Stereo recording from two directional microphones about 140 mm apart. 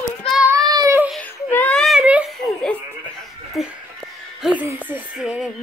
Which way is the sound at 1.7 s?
Centre (ahead or behind).